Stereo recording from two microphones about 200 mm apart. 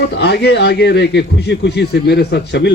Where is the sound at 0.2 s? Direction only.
55° left (ahead or behind).